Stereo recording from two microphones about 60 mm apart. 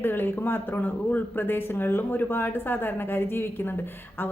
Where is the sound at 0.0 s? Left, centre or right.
Left.